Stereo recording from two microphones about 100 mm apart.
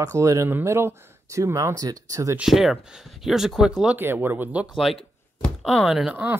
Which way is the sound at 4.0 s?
20° right (ahead or behind).